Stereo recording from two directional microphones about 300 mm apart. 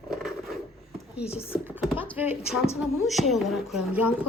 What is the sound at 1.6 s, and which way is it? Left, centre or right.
Speech, centre.